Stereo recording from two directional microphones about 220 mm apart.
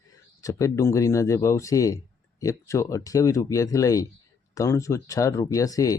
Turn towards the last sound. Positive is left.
turn(degrees=15)  # may be behind; listen again after turning